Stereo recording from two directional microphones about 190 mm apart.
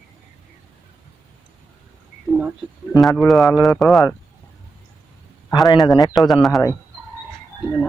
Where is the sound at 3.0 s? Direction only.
Centre (ahead or behind).